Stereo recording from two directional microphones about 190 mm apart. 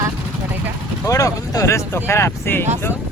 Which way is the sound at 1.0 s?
15° left (ahead or behind).